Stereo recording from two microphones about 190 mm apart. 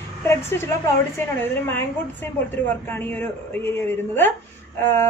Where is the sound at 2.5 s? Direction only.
10° left (ahead or behind).